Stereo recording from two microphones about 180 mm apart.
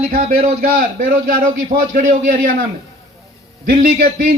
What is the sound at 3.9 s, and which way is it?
Speech, 55° right (ahead or behind).